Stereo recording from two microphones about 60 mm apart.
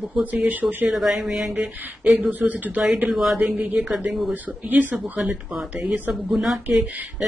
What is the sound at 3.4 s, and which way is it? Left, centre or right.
Speech, right.